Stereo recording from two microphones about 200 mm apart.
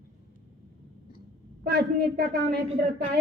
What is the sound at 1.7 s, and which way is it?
Speech, 50° right (ahead or behind).